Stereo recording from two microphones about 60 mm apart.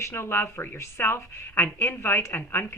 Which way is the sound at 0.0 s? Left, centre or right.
Left.